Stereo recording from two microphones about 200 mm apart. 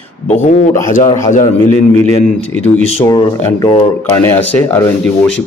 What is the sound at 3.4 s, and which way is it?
Speech, 15° left (ahead or behind).